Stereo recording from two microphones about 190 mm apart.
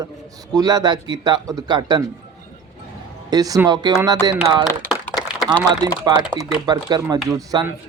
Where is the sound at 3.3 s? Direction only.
20° right (ahead or behind).